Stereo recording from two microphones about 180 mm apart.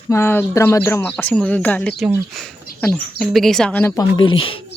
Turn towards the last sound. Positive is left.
turn(degrees=30)  # may be behind; listen again after turning